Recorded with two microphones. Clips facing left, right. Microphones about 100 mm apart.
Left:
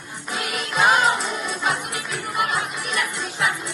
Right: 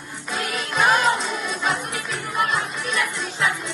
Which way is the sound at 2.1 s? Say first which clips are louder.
Even; 15° left (ahead or behind).